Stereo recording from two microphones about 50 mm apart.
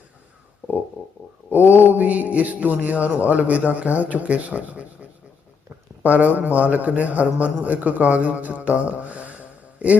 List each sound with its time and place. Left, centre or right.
1.5 s a man's voice: right
6.0 s a man's voice: right